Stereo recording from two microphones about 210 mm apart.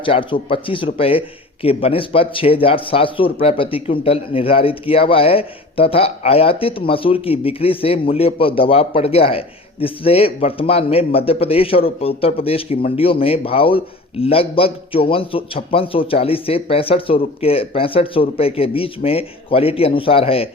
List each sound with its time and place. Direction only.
0.0 s speech: 25° left (ahead or behind)